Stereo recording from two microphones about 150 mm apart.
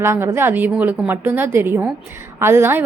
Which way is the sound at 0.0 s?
15° right (ahead or behind).